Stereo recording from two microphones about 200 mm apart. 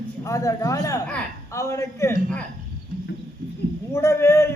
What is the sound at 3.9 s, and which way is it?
Speech, 15° left (ahead or behind).